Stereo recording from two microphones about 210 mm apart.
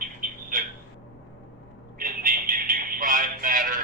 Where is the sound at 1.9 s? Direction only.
40° right (ahead or behind).